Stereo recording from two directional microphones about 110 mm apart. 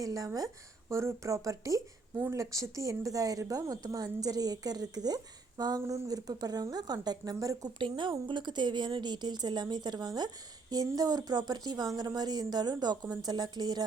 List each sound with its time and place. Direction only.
0.0 s a woman's voice: 30° right (ahead or behind)
7.8 s a woman's voice: 45° right (ahead or behind)